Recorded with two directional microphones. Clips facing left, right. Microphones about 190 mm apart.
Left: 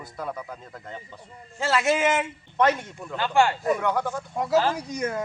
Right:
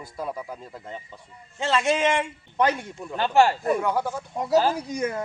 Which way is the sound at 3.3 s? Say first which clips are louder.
Right 2 dB; 35° right (ahead or behind).